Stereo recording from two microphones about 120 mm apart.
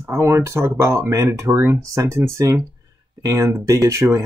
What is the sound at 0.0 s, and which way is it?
Speech, 20° right (ahead or behind).